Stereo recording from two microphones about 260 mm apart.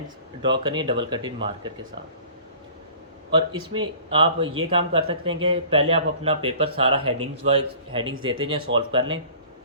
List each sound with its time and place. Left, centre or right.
0.6 s speech: centre
3.5 s speech: centre